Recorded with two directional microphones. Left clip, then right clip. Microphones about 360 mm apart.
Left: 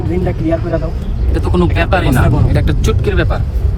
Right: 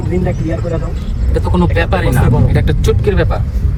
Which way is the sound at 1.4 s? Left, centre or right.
Centre.